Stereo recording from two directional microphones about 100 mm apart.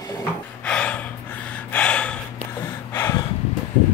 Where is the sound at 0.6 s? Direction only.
10° left (ahead or behind).